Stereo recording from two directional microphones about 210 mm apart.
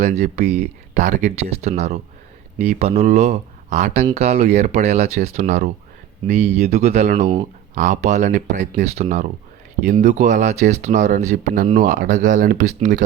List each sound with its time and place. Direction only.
0.0 s speech: 30° right (ahead or behind)